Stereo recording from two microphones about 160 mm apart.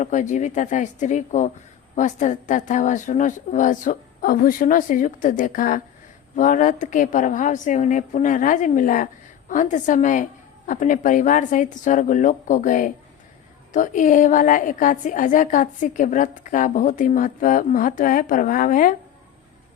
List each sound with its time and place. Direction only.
0.0 s a woman's voice: 50° left (ahead or behind)